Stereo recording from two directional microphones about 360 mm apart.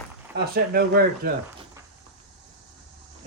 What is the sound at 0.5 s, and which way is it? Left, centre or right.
Speech, right.